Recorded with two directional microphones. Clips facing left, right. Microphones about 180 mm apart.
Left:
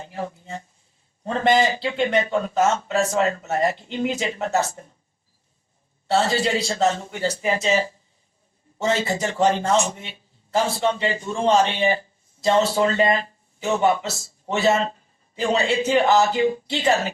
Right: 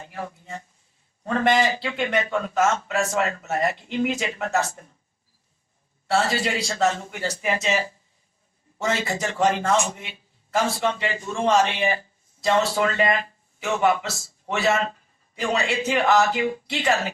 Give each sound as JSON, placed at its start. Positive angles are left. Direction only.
{"t": 0.0, "sound": "a sound", "side_deg": 30}
{"t": 1.2, "sound": "a man's voice", "side_deg": 30}
{"t": 6.1, "sound": "a man's voice", "side_deg": 25}
{"t": 9.0, "sound": "a man's voice", "side_deg": 20}